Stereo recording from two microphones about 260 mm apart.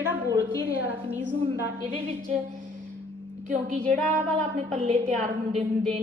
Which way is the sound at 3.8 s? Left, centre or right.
Centre.